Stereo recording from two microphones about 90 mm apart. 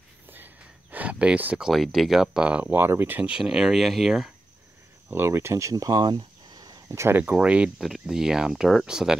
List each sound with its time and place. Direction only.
0.9 s speech: 15° right (ahead or behind)
1.7 s speech: centre (ahead or behind)
2.6 s speech: 25° right (ahead or behind)
3.3 s speech: 5° right (ahead or behind)
5.1 s speech: 30° right (ahead or behind); by 6.8 s 45° right (ahead or behind)
6.9 s speech: 25° right (ahead or behind); by 9.1 s 5° right (ahead or behind)